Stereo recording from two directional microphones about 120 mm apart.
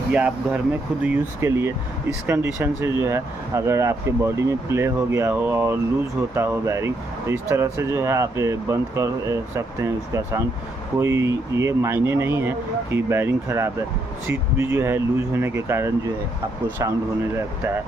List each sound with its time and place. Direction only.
0.1 s speech: 10° right (ahead or behind)